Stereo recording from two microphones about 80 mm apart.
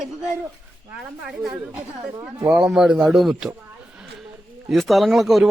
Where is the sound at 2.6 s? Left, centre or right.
Centre.